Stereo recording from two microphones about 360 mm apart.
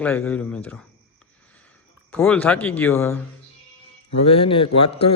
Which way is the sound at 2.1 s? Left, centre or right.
Centre.